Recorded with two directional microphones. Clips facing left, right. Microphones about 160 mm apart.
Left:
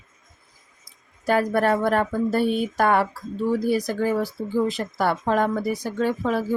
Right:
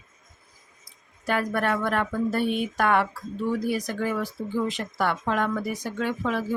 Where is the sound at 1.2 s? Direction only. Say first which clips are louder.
Left 5 dB; 35° left (ahead or behind).